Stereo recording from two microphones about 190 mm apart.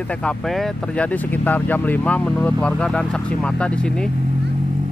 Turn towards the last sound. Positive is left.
turn(degrees=5)  # may be behind; listen again after turning